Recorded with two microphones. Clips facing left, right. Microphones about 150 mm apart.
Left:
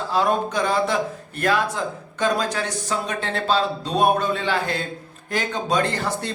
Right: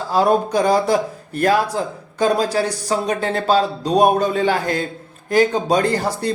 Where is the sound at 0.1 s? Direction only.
40° right (ahead or behind).